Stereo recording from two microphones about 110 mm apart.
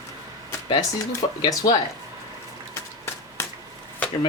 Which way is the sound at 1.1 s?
35° left (ahead or behind).